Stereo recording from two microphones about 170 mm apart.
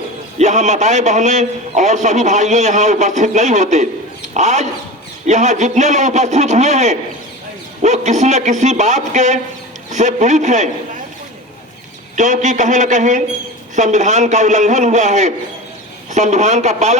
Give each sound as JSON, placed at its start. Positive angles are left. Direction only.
{"t": 0.3, "sound": "a man's voice", "side_deg": -40}
{"t": 12.1, "sound": "a man's voice", "side_deg": -45}